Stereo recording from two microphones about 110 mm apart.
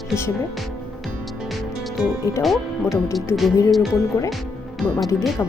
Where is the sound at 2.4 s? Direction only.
Centre (ahead or behind).